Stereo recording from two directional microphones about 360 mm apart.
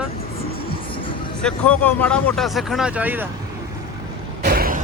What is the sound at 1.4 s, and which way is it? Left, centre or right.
Speech, centre.